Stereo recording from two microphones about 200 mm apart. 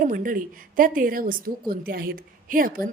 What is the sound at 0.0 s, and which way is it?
A woman's voice, 45° right (ahead or behind).